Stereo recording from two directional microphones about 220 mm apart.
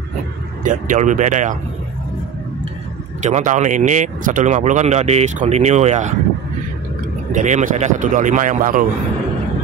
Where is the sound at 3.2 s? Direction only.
35° right (ahead or behind).